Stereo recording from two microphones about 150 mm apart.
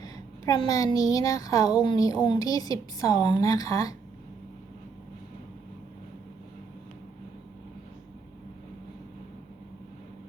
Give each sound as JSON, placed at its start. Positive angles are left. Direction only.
{"t": 0.0, "sound": "a woman's voice", "side_deg": 25}